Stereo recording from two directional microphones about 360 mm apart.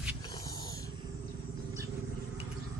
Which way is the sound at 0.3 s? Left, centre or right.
Centre.